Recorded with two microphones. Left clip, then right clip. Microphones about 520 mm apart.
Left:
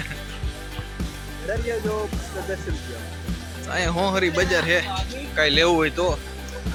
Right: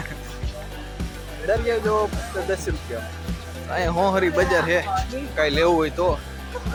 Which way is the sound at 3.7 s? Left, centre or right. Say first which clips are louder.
Right 2 dB; left.